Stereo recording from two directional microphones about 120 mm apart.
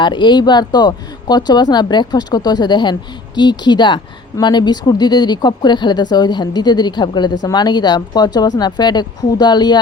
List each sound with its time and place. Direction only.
0.0 s a woman's voice: 40° left (ahead or behind)